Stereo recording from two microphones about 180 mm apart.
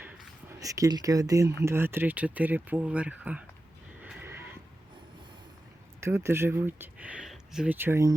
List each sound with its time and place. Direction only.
0.0 s a sound: 10° right (ahead or behind)
1.6 s speech: 15° right (ahead or behind)
4.0 s horse: 10° right (ahead or behind)
6.0 s speech: 15° right (ahead or behind)